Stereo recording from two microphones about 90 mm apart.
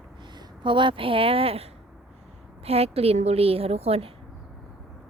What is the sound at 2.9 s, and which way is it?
A woman's voice, 90° right.